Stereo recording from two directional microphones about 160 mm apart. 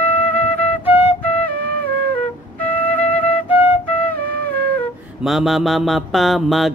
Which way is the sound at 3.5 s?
10° right (ahead or behind).